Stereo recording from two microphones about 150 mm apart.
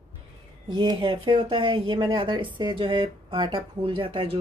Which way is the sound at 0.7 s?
30° right (ahead or behind).